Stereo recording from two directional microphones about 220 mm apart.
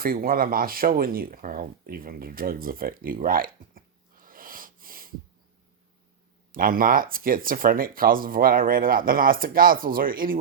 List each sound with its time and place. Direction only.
0.0 s speech: 40° right (ahead or behind)
6.5 s speech: 40° right (ahead or behind)